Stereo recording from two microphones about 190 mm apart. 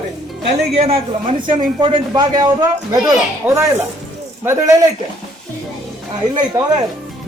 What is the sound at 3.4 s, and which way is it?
A man's voice, 10° right (ahead or behind).